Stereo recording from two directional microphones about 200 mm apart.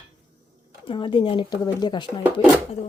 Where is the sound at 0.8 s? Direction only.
25° left (ahead or behind).